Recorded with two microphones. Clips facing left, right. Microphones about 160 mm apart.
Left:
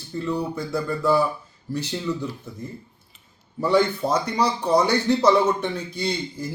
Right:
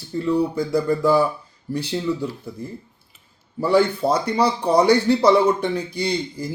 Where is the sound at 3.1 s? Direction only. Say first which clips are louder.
Right 3 dB; 10° right (ahead or behind).